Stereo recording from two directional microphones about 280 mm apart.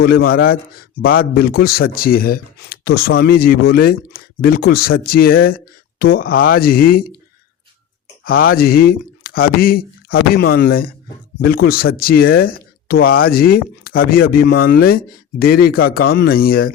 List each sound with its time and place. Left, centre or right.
0.0 s speech: left
8.2 s speech: left